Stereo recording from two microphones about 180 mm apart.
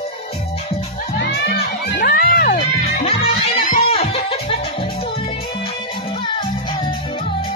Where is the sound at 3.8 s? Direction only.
35° left (ahead or behind).